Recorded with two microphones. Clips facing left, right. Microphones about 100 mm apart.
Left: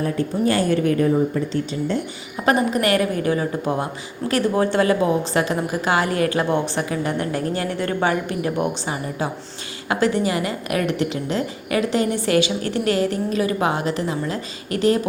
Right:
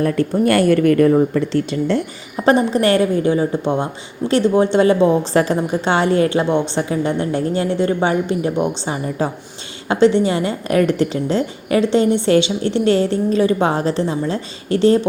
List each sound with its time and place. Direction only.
0.0 s speech: 60° right (ahead or behind)
2.3 s a woman's voice: 30° right (ahead or behind)